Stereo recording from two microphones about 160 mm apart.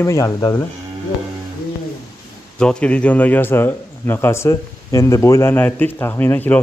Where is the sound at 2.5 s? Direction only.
5° left (ahead or behind).